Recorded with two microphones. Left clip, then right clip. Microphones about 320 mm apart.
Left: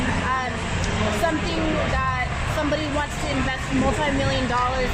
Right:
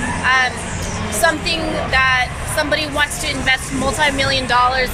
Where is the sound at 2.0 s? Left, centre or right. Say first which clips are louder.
Right 10 dB; right.